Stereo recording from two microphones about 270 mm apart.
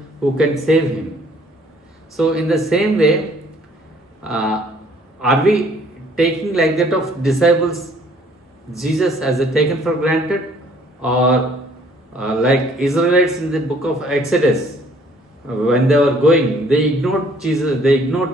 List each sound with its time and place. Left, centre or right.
0.7 s a man's voice: centre
2.1 s a man's voice: centre
4.2 s a man's voice: centre
8.7 s a man's voice: centre
15.4 s a man's voice: centre